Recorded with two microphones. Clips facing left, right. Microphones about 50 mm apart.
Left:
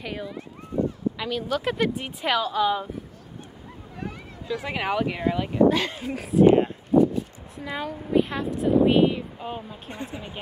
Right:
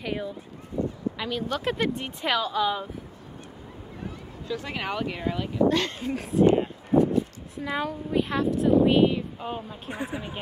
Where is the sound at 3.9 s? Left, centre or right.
Left.